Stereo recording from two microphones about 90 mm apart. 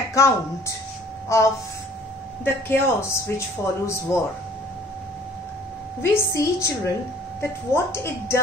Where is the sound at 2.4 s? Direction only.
25° left (ahead or behind).